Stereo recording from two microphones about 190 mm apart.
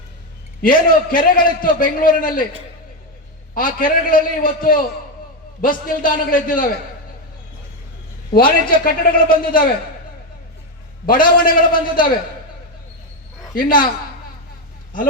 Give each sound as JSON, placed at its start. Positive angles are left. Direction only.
{"t": 0.6, "sound": "a man's voice", "side_deg": 45}
{"t": 3.5, "sound": "a man's voice", "side_deg": 45}
{"t": 5.9, "sound": "a man's voice", "side_deg": 45}
{"t": 8.3, "sound": "a man's voice", "side_deg": 50}
{"t": 11.0, "sound": "a man's voice", "side_deg": 50}
{"t": 13.6, "sound": "a man's voice", "side_deg": 45}